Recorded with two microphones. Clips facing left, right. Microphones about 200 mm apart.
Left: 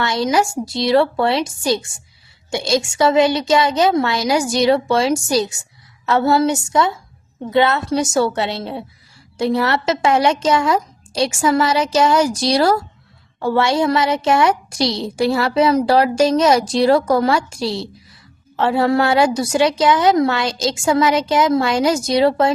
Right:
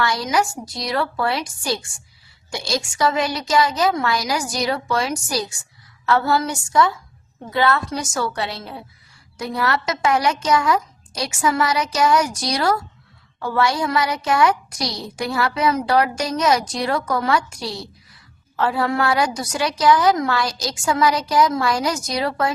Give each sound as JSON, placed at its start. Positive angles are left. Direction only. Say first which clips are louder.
{"t": 0.0, "sound": "a woman's voice", "louder": "left 3 dB", "side_deg": 25}